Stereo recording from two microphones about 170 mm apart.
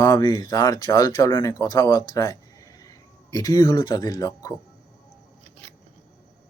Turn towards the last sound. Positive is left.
turn(degrees=20)  # may be behind; listen again after turning